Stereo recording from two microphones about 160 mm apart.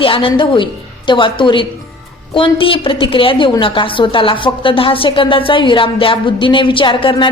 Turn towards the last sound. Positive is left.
turn(degrees=30)  # may be behind; listen again after turning